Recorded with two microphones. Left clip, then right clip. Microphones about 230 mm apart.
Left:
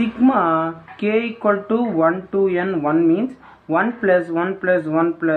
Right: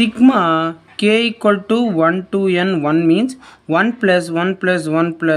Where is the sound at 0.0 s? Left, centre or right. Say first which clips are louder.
Right 4 dB; right.